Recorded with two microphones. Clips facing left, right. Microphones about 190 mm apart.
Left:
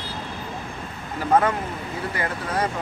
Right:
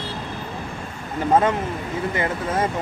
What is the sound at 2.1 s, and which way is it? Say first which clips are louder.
Speech: right 2 dB; 25° right (ahead or behind).